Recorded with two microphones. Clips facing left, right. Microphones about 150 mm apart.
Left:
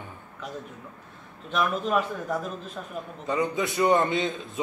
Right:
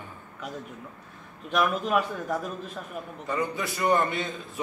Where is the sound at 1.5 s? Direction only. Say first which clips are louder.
Right 1 dB; 10° right (ahead or behind).